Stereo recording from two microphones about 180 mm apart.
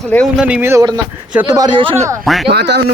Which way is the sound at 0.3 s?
5° right (ahead or behind).